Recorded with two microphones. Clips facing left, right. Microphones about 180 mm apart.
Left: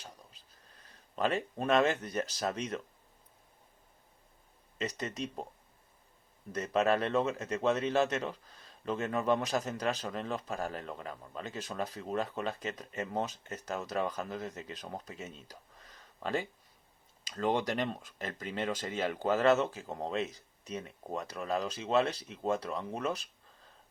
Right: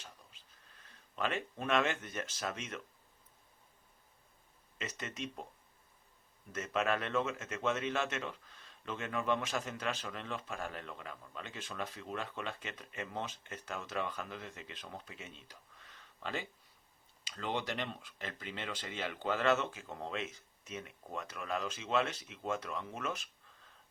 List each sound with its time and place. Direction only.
0.0 s a sound: 40° left (ahead or behind)
4.8 s speech: 35° left (ahead or behind)
6.5 s speech: 35° left (ahead or behind)